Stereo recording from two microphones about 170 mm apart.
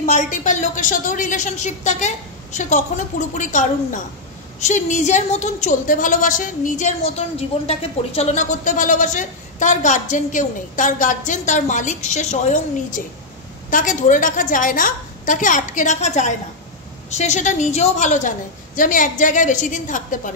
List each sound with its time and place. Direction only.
0.0 s a woman's voice: 45° left (ahead or behind)